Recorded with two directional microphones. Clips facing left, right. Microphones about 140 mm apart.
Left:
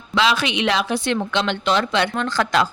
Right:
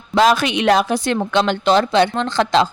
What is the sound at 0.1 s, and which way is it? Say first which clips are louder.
A woman's voice: right 5 dB; 45° right (ahead or behind).